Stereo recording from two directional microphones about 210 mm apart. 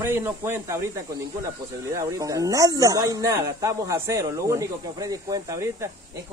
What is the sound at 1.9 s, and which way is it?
Speech, 15° right (ahead or behind).